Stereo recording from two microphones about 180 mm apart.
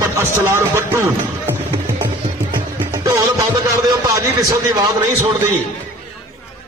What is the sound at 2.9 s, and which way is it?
A man's voice, 15° right (ahead or behind).